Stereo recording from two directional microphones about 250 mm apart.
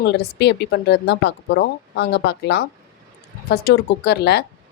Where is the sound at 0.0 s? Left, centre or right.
Left.